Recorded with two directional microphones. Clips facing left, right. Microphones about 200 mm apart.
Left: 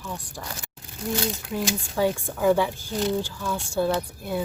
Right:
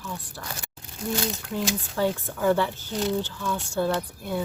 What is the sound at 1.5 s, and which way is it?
Speech, 10° left (ahead or behind).